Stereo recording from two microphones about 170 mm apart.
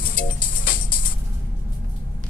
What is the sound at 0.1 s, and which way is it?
Music, 55° left (ahead or behind).